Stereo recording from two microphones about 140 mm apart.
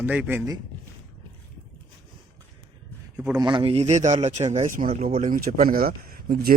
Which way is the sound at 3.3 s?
35° right (ahead or behind).